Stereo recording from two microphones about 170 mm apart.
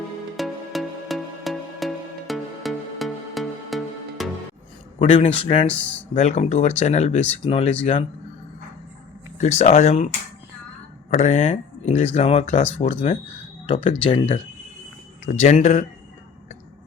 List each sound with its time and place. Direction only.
0.3 s music: centre (ahead or behind)
4.9 s speech: 35° left (ahead or behind)
5.6 s speech: 10° left (ahead or behind)
6.1 s speech: 40° left (ahead or behind)
9.4 s speech: 40° left (ahead or behind)
11.2 s speech: 45° left (ahead or behind)
13.7 s speech: 35° left (ahead or behind)